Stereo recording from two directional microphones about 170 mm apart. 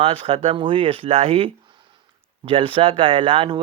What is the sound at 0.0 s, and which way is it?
Speech, 35° right (ahead or behind).